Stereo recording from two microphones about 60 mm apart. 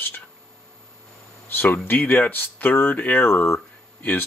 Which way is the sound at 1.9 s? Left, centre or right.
Left.